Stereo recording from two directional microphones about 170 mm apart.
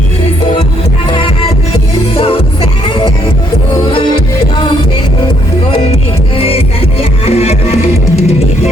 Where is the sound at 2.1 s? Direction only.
35° left (ahead or behind).